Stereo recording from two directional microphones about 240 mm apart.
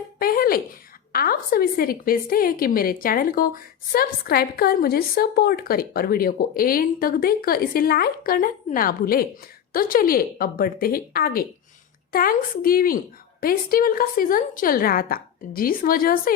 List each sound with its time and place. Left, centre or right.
0.2 s a woman's voice: left